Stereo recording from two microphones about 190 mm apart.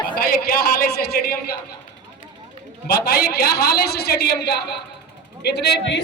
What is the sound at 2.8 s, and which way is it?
Speech, 55° left (ahead or behind).